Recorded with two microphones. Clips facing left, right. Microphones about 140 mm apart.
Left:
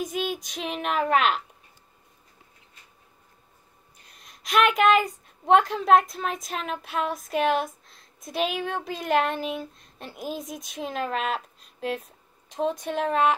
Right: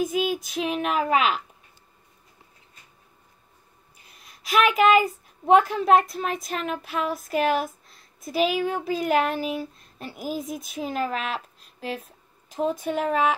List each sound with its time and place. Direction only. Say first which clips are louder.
0.0 s a woman's voice: right 4 dB; 5° right (ahead or behind)
4.0 s a woman's voice: even; 5° right (ahead or behind)